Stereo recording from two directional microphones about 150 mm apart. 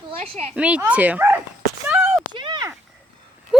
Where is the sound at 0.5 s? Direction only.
10° right (ahead or behind).